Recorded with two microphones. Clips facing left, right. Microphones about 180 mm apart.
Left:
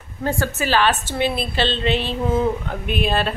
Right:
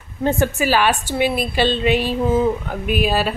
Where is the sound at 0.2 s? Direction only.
20° right (ahead or behind).